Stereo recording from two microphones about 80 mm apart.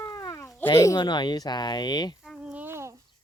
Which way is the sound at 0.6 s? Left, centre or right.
Left.